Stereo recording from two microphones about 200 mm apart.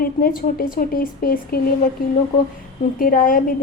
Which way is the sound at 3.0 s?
45° left (ahead or behind).